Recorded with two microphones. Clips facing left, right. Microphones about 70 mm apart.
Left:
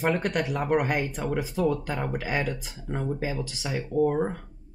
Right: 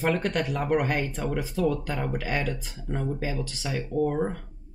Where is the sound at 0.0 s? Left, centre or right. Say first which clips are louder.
Even; centre.